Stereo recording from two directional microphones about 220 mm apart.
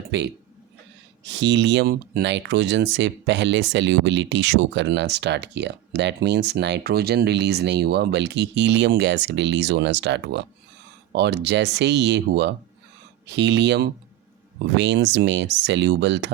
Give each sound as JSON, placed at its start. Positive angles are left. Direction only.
{"t": 0.1, "sound": "speech", "side_deg": -50}